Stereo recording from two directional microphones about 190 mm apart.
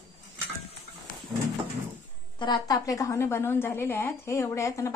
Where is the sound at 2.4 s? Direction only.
20° left (ahead or behind).